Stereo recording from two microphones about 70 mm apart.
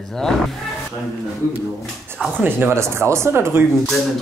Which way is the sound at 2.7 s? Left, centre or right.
Right.